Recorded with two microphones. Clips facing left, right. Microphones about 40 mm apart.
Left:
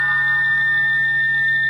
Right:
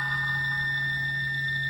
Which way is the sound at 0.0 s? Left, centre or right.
Left.